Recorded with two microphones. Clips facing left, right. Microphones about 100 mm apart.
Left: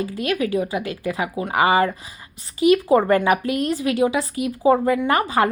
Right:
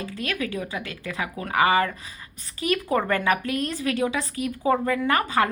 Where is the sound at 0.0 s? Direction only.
30° left (ahead or behind).